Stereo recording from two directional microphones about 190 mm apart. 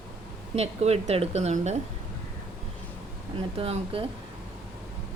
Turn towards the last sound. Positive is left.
turn(degrees=-30)  # may be behind; listen again after turning